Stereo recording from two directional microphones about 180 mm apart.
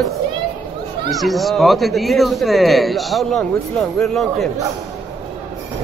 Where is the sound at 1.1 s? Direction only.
Centre (ahead or behind).